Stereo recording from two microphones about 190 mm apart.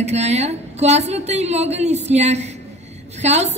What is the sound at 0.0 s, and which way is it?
A woman's voice, 35° right (ahead or behind).